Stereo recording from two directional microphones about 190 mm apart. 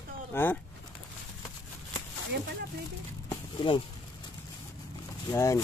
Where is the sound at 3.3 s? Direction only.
25° left (ahead or behind).